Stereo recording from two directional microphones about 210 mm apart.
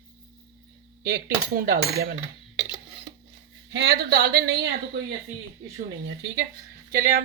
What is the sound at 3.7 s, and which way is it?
Speech, 55° right (ahead or behind).